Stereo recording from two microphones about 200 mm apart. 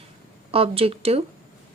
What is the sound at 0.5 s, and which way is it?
Speech, 30° right (ahead or behind).